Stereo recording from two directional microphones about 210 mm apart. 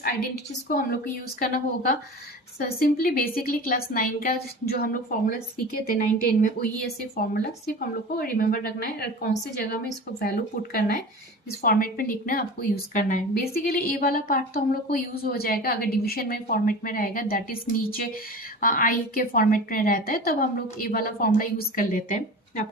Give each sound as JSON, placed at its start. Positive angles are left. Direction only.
{"t": 1.4, "sound": "a woman's voice", "side_deg": 45}